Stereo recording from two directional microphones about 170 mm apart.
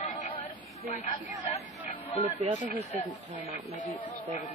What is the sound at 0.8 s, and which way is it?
Speech, 40° left (ahead or behind).